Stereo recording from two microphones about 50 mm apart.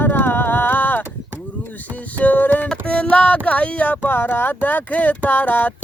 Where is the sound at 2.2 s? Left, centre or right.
Left.